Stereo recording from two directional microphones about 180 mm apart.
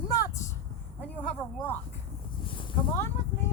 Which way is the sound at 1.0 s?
5° left (ahead or behind).